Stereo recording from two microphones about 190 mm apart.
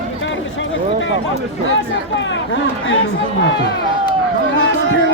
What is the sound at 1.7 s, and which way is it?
Speech, 75° left (ahead or behind).